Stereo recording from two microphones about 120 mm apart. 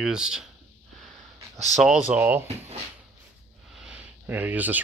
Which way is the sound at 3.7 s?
10° right (ahead or behind).